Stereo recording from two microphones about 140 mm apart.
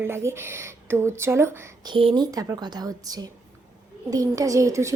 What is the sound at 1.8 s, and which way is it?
A woman's voice, 35° right (ahead or behind).